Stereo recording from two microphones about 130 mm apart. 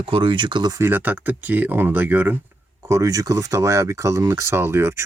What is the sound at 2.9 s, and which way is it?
Speech, 25° right (ahead or behind).